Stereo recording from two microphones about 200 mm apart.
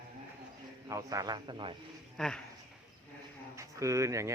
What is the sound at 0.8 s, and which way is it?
Speech, 15° right (ahead or behind).